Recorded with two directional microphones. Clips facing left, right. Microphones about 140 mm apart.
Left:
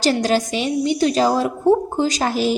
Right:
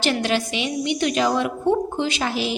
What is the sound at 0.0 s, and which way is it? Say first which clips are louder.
A woman's voice: left 4 dB; 40° left (ahead or behind).